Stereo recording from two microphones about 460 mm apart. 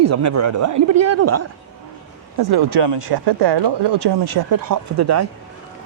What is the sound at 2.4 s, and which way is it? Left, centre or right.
Speech, right.